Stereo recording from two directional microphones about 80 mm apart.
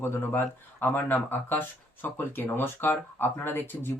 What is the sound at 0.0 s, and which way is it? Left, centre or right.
Speech, left.